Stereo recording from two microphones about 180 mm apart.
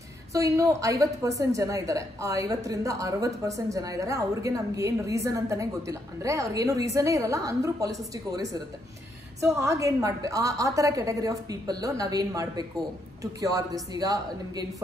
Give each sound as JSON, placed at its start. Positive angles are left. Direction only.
{"t": 0.3, "sound": "a woman's voice", "side_deg": -20}